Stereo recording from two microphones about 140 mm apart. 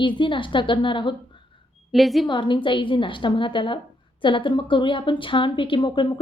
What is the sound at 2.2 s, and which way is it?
A woman's voice, 35° left (ahead or behind).